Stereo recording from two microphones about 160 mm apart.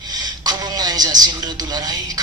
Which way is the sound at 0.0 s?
25° right (ahead or behind).